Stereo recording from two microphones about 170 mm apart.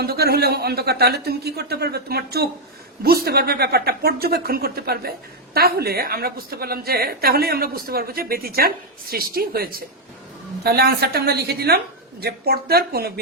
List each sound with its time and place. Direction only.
0.0 s a woman's voice: 70° right (ahead or behind)